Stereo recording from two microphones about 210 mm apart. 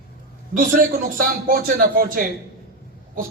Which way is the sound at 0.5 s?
40° right (ahead or behind).